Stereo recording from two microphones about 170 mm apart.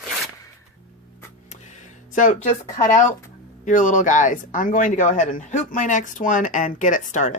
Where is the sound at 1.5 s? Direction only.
45° left (ahead or behind).